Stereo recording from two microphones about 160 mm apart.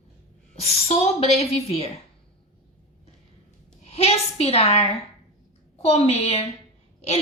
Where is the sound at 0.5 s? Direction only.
40° left (ahead or behind).